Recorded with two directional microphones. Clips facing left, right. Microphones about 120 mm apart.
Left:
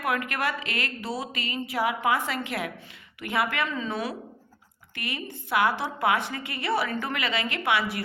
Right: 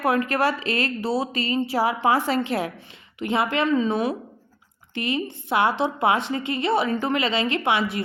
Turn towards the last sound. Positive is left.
turn(degrees=-25)  # may be behind; listen again after turning